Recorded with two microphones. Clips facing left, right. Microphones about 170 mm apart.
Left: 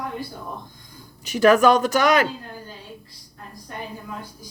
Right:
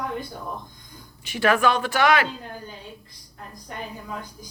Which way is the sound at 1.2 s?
40° left (ahead or behind).